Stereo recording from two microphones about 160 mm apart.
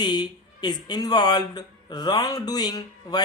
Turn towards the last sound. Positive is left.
turn(degrees=25)  # may be behind; listen again after turning